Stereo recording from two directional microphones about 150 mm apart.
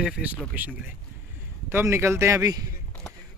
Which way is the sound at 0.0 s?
10° right (ahead or behind).